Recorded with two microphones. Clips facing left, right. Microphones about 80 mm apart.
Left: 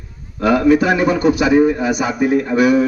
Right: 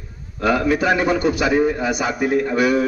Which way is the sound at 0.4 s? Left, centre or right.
Centre.